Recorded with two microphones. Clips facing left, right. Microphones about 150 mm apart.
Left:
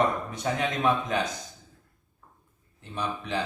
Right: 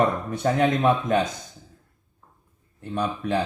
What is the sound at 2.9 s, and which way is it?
Speech, 50° right (ahead or behind).